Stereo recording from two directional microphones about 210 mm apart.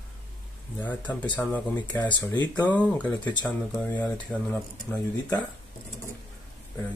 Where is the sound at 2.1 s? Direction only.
20° left (ahead or behind).